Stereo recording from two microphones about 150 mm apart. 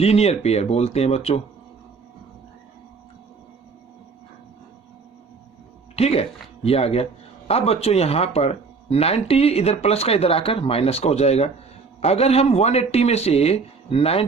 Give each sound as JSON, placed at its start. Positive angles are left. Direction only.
{"t": 0.0, "sound": "speech", "side_deg": 45}
{"t": 6.0, "sound": "speech", "side_deg": 45}